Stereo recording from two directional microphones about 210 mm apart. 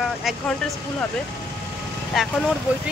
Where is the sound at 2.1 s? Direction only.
Centre (ahead or behind).